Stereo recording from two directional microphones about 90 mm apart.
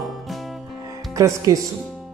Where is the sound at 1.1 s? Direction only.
40° right (ahead or behind).